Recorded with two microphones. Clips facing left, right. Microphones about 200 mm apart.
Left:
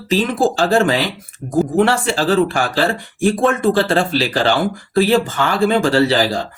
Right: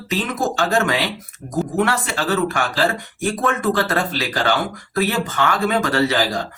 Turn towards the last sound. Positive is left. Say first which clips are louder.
# left 4 dB
turn(degrees=30)  # may be behind; listen again after turning